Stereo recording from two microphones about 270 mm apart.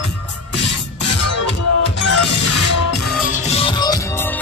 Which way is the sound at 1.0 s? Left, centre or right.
Left.